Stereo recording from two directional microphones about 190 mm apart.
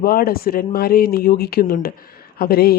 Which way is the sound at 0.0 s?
50° left (ahead or behind).